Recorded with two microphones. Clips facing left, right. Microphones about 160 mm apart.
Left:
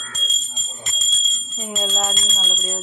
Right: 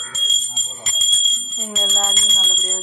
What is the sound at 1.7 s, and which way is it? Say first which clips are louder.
Jingle bell: left 1 dB; 10° left (ahead or behind).